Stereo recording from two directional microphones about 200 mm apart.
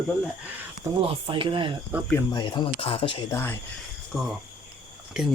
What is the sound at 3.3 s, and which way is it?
Speech, 10° left (ahead or behind).